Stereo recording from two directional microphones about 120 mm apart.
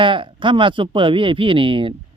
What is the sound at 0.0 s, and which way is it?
Speech, 45° right (ahead or behind).